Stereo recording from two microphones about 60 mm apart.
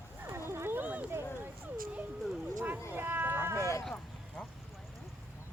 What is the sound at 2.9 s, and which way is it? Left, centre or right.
Cat, right.